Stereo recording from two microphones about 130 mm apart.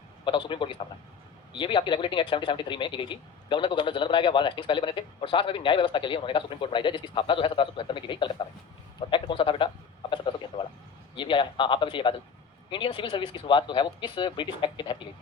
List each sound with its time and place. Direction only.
0.3 s speech: 40° left (ahead or behind)
10.1 s a sound: 40° left (ahead or behind)
11.1 s speech: 40° left (ahead or behind)